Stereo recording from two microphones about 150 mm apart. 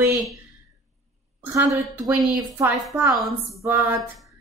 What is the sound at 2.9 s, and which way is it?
A woman's voice, 20° right (ahead or behind).